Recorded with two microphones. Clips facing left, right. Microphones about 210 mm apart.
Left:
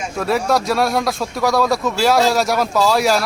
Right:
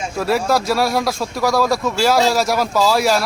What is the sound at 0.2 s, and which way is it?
Speech, centre (ahead or behind).